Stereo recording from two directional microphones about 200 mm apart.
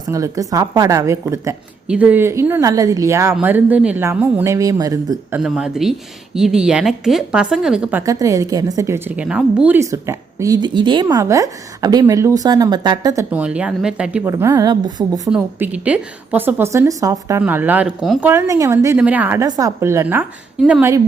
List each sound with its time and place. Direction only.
0.1 s a woman's voice: 15° right (ahead or behind)
5.4 s a woman's voice: 5° right (ahead or behind); by 13.2 s 20° right (ahead or behind)
13.3 s a woman's voice: 5° right (ahead or behind)
18.3 s a woman's voice: 15° right (ahead or behind)